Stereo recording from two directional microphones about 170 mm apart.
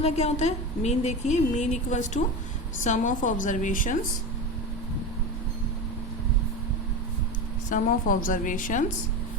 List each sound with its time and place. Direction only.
0.0 s a woman's voice: 40° left (ahead or behind)
7.7 s a woman's voice: 55° left (ahead or behind)